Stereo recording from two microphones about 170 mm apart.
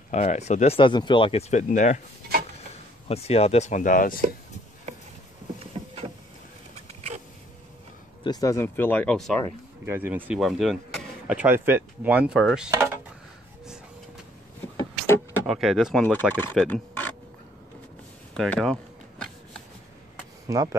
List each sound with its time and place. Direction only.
0.1 s speech: 45° left (ahead or behind)
0.7 s speech: 30° left (ahead or behind)
1.6 s speech: 45° left (ahead or behind)
3.1 s speech: 35° left (ahead or behind); by 4.2 s 55° left (ahead or behind)
8.2 s speech: 20° left (ahead or behind); by 9.4 s 5° left (ahead or behind)
9.8 s speech: 10° right (ahead or behind)
12.7 s speech: 15° right (ahead or behind)
15.4 s speech: centre (ahead or behind)
18.3 s a sound: centre (ahead or behind)
20.4 s speech: 20° right (ahead or behind)